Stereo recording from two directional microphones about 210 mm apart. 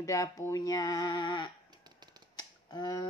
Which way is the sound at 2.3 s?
20° left (ahead or behind).